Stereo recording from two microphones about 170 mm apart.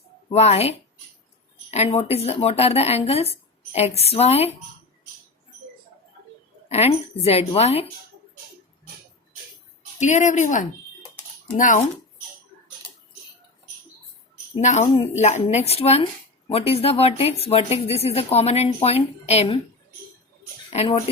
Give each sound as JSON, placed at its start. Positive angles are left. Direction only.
{"t": 0.3, "sound": "speech", "side_deg": 40}
{"t": 6.7, "sound": "speech", "side_deg": 40}
{"t": 10.0, "sound": "a woman's voice", "side_deg": 45}
{"t": 14.6, "sound": "speech", "side_deg": 45}
{"t": 20.7, "sound": "speech", "side_deg": 35}